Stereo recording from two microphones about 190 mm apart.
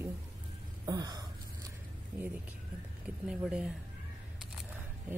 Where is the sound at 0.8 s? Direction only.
20° right (ahead or behind).